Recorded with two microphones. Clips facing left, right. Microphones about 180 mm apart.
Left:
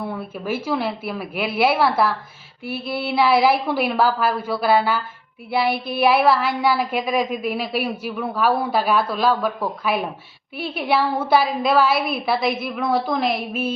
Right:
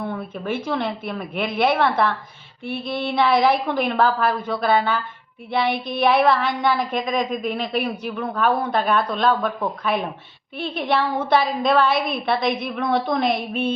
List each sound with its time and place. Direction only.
0.0 s a woman's voice: 5° left (ahead or behind)